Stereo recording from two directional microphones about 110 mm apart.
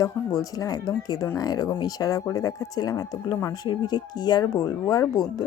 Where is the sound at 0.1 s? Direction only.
20° left (ahead or behind).